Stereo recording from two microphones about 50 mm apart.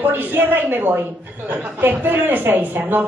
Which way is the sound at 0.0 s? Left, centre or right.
Right.